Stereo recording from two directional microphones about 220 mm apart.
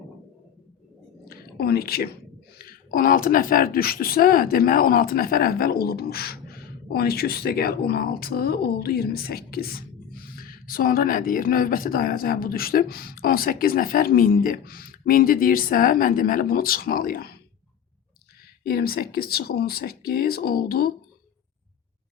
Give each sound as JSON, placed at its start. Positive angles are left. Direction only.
{"t": 1.2, "sound": "a sound", "side_deg": 45}
{"t": 2.6, "sound": "speech", "side_deg": 40}
{"t": 18.6, "sound": "speech", "side_deg": 45}